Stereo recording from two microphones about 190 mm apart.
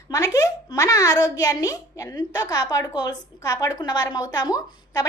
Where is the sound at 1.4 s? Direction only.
20° left (ahead or behind).